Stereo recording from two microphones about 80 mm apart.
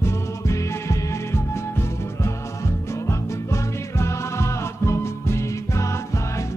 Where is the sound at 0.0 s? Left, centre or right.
Left.